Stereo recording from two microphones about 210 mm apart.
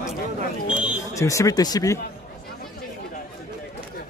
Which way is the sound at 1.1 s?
15° left (ahead or behind).